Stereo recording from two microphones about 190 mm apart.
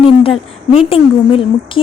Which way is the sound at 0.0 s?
30° left (ahead or behind).